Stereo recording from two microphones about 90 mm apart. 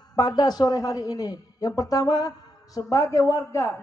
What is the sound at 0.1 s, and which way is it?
A man's voice, 50° left (ahead or behind).